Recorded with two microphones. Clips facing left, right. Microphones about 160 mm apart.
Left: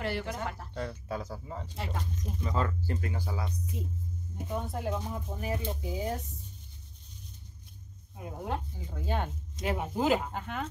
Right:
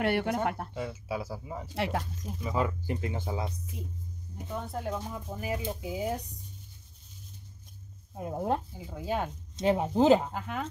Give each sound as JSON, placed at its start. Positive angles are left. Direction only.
{"t": 0.0, "sound": "speech", "side_deg": -60}
{"t": 0.7, "sound": "speech", "side_deg": -5}
{"t": 1.8, "sound": "speech", "side_deg": -75}
{"t": 2.4, "sound": "speech", "side_deg": -10}
{"t": 4.6, "sound": "speech", "side_deg": 5}
{"t": 8.2, "sound": "speech", "side_deg": -40}
{"t": 8.7, "sound": "speech", "side_deg": -10}
{"t": 9.6, "sound": "speech", "side_deg": -30}
{"t": 10.3, "sound": "speech", "side_deg": 0}